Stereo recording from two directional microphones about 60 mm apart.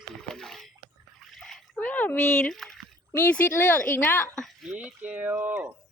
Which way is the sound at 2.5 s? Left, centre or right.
Centre.